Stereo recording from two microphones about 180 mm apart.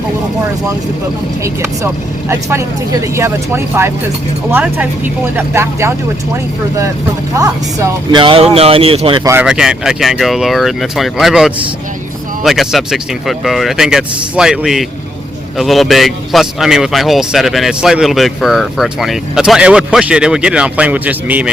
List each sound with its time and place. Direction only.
2.3 s speech: 15° right (ahead or behind)
8.2 s speech: 30° right (ahead or behind)
9.2 s speech: 15° right (ahead or behind)
9.5 s speech: 5° right (ahead or behind)